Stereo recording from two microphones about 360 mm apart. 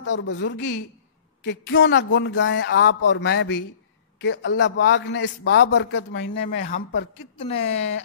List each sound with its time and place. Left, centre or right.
0.0 s a man's voice: left; by 7.6 s centre
7.6 s a man's voice: left